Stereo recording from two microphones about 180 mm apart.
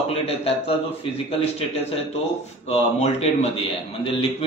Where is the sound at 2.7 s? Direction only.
35° left (ahead or behind).